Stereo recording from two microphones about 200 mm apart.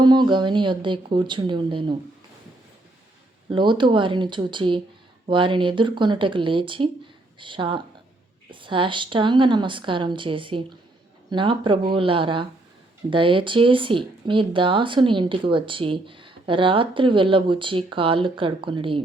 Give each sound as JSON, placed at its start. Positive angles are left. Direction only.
{"t": 0.0, "sound": "speech", "side_deg": -20}
{"t": 3.5, "sound": "speech", "side_deg": -25}